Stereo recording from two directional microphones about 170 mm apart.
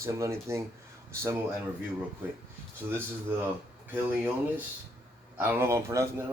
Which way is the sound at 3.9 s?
10° right (ahead or behind).